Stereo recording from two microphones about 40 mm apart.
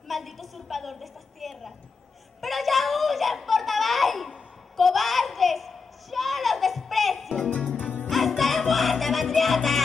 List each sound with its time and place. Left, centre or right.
0.1 s a sound: centre
7.4 s music: left
8.1 s music: centre